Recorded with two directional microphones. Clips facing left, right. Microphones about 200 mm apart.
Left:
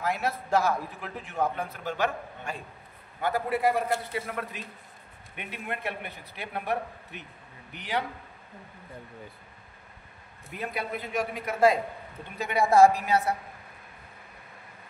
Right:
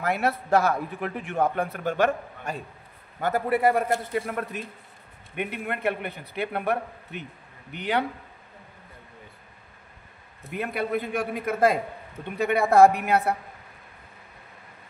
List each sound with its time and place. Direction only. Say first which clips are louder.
0.0 s a man's voice: right 4 dB; 60° right (ahead or behind)
10.6 s a man's voice: right 6 dB; 55° right (ahead or behind)